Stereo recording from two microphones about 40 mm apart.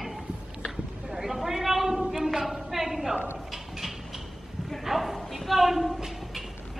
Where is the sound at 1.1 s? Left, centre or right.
Centre.